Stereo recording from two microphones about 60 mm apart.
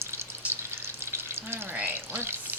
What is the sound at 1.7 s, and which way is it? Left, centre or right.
Pour, right.